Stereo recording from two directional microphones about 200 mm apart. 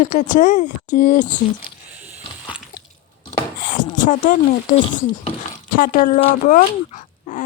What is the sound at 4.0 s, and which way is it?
Speech, 40° left (ahead or behind).